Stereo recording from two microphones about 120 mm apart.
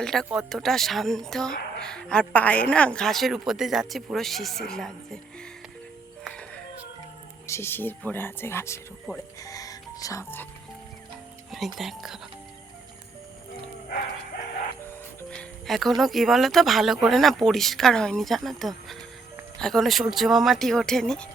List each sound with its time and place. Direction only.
0.0 s a woman's voice: 5° left (ahead or behind)
7.4 s speech: 20° left (ahead or behind)
11.8 s a woman's voice: centre (ahead or behind)
15.3 s a woman's voice: 5° left (ahead or behind)